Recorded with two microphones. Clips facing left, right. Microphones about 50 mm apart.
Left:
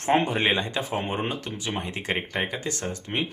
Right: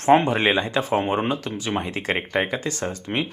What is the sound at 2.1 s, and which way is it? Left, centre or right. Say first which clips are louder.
Speech: right 4 dB; centre.